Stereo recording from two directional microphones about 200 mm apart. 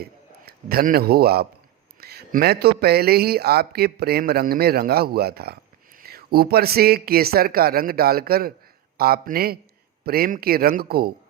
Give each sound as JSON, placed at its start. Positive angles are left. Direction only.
{"t": 0.0, "sound": "a man's voice", "side_deg": -50}